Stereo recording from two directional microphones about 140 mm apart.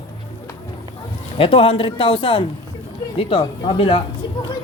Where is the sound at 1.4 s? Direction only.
40° left (ahead or behind).